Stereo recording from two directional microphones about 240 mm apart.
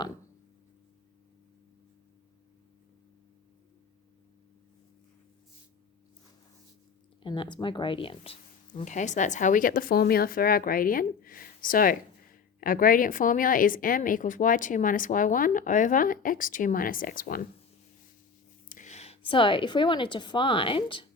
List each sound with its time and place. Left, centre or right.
7.2 s speech: centre; by 17.4 s left
18.7 s a woman's voice: left